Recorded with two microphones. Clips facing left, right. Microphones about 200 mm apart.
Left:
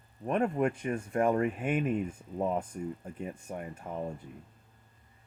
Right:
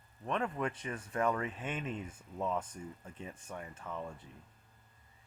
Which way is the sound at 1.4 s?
60° left (ahead or behind).